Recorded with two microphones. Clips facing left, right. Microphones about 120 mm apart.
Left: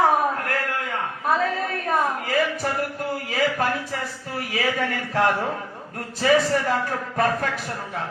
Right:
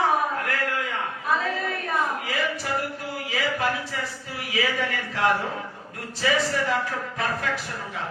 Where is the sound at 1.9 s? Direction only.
45° left (ahead or behind).